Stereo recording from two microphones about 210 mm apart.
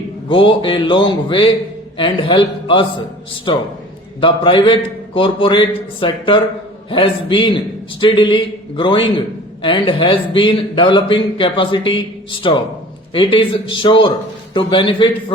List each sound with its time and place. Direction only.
0.3 s a man's voice: 25° left (ahead or behind)